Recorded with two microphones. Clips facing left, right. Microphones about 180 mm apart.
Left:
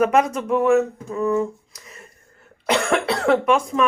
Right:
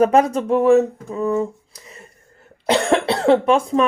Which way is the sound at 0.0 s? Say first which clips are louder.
Right 3 dB; 30° right (ahead or behind).